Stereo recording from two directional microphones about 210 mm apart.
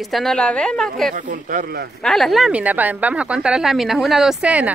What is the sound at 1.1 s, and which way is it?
Speech, 40° right (ahead or behind).